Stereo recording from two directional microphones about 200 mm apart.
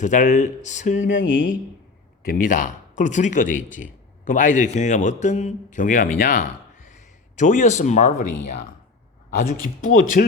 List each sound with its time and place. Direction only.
0.0 s a man's voice: 40° left (ahead or behind)
2.2 s a man's voice: 45° left (ahead or behind)